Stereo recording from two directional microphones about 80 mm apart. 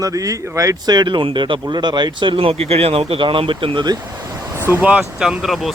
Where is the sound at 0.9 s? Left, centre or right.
Right.